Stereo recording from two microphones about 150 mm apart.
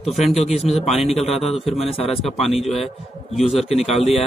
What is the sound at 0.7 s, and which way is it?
Speech, centre (ahead or behind).